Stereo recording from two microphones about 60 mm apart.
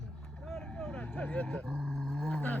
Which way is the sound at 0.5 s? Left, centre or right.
Centre.